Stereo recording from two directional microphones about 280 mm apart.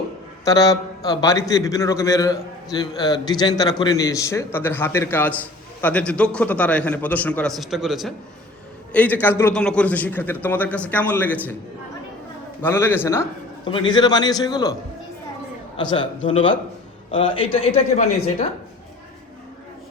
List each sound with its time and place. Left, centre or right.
0.4 s a man's voice: centre
12.6 s a man's voice: centre